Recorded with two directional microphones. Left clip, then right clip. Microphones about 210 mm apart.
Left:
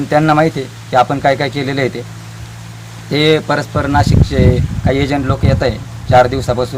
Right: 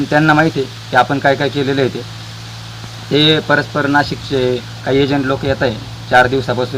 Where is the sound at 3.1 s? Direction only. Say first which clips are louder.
Right 1 dB; 30° left (ahead or behind).